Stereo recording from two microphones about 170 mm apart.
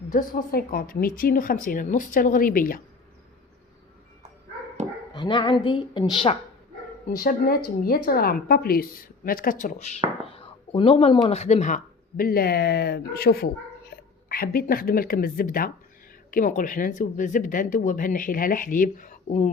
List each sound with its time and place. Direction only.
0.1 s speech: 50° left (ahead or behind)
5.1 s a woman's voice: 25° left (ahead or behind)
7.2 s a woman's voice: 60° left (ahead or behind)